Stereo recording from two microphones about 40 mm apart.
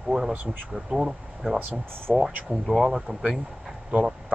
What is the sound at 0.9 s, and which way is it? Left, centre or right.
Speech, centre.